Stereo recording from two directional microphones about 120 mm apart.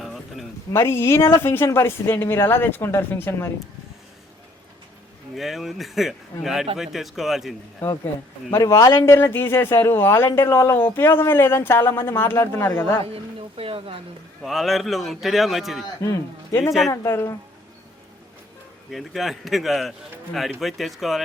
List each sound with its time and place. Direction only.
0.0 s a sound: centre (ahead or behind)
0.7 s speech: 20° left (ahead or behind)
5.3 s a man's voice: centre (ahead or behind)
7.8 s speech: 15° left (ahead or behind)
8.5 s speech: 30° left (ahead or behind)
13.6 s speech: 50° right (ahead or behind)
14.4 s a man's voice: centre (ahead or behind)
16.0 s speech: 25° left (ahead or behind)
18.9 s a man's voice: centre (ahead or behind)